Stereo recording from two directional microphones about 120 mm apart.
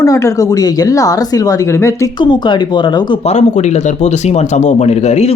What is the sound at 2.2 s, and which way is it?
Speech, 40° left (ahead or behind).